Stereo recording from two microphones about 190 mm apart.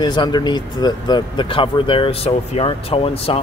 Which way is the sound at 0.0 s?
25° left (ahead or behind).